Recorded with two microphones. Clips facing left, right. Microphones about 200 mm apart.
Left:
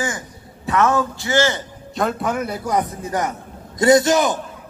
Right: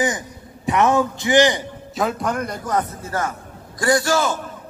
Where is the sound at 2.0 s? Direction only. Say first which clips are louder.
Left 1 dB; centre (ahead or behind).